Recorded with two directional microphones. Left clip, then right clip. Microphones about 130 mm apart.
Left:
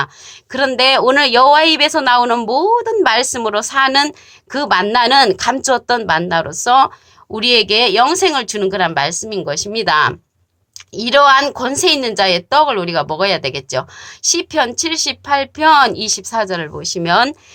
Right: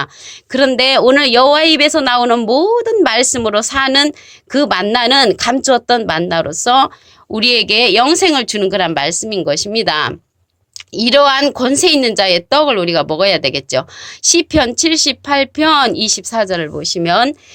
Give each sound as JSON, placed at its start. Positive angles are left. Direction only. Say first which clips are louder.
{"t": 0.0, "sound": "a woman's voice", "louder": "left 1 dB", "side_deg": -30}